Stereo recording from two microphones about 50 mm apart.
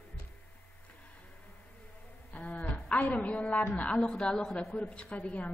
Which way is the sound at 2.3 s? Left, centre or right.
Left.